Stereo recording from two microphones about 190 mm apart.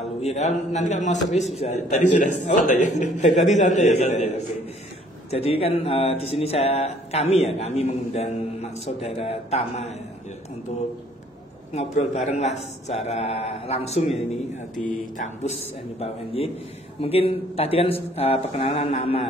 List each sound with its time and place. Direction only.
0.0 s speech: 35° left (ahead or behind)
11.7 s speech: 35° left (ahead or behind)
14.8 s speech: 45° left (ahead or behind)